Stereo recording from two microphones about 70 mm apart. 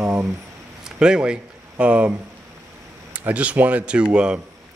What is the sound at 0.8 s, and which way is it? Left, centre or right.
Speech, centre.